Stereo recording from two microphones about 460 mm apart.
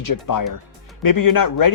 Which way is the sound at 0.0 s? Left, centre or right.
Left.